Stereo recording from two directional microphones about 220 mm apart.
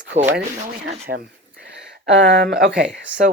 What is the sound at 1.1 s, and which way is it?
Speech, 45° right (ahead or behind).